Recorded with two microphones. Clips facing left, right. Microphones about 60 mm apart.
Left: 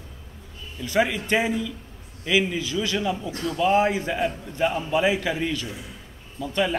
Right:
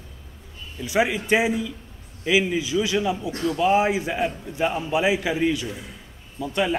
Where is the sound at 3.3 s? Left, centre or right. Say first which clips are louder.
Right 4 dB; right.